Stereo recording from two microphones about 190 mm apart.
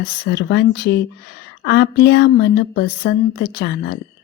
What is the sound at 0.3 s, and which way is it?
A woman's voice, 65° left (ahead or behind).